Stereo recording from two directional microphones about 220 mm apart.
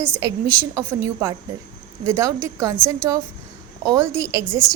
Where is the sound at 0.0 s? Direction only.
10° right (ahead or behind).